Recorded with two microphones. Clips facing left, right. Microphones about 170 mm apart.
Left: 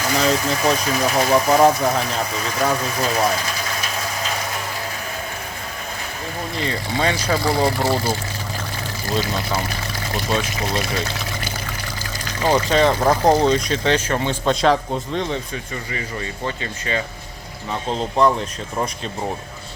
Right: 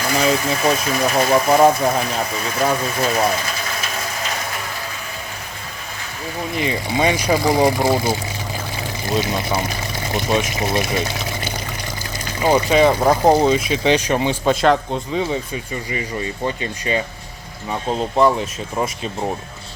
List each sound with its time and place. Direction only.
0.2 s speech: 10° right (ahead or behind)
6.6 s speech: 15° right (ahead or behind)
9.2 s speech: 20° right (ahead or behind)
14.5 s speech: centre (ahead or behind)
15.9 s speech: 20° right (ahead or behind)